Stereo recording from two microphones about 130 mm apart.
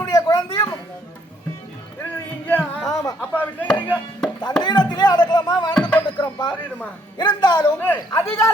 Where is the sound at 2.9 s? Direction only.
25° left (ahead or behind).